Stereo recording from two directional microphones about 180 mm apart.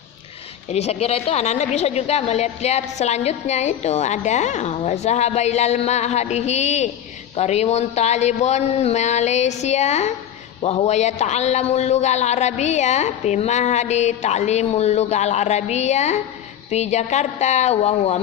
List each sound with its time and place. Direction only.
0.7 s a man's voice: 35° left (ahead or behind)